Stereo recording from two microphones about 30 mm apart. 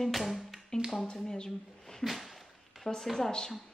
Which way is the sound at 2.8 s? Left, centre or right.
Centre.